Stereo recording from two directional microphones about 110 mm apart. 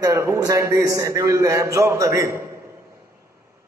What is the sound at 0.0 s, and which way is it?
A man's voice, 25° right (ahead or behind).